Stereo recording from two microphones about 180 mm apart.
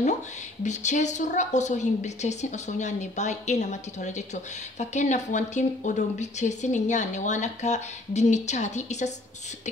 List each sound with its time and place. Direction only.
0.7 s a woman's voice: 40° left (ahead or behind)